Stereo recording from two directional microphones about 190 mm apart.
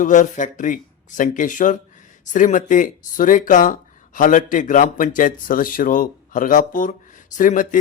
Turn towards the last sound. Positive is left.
turn(degrees=45)  # may be behind; listen again after turning